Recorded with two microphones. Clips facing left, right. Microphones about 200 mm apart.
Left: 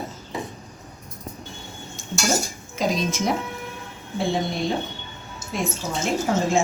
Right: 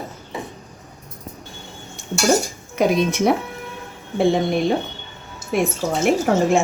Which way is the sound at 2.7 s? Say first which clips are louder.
Right 6 dB; 60° right (ahead or behind).